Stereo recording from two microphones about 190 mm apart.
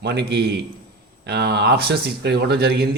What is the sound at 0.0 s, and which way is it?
Speech, 60° right (ahead or behind).